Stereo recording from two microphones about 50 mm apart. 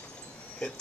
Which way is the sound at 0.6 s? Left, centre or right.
Centre.